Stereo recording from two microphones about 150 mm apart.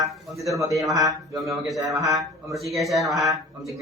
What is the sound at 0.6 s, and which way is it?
A man's voice, 20° right (ahead or behind).